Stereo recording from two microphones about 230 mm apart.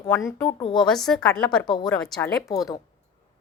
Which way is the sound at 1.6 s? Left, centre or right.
Centre.